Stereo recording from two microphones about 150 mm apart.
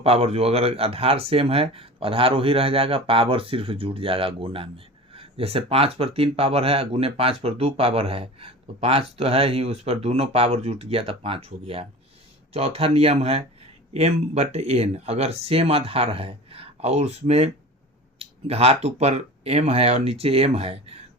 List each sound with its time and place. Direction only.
0.0 s speech: 40° right (ahead or behind)